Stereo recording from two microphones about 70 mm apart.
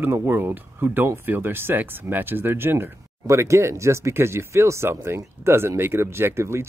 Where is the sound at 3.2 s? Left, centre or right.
Right.